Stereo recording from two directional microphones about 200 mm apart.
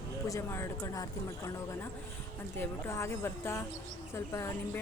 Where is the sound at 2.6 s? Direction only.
10° left (ahead or behind).